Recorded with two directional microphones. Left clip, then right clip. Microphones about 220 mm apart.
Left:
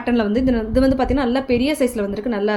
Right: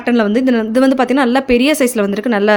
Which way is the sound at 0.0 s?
25° right (ahead or behind).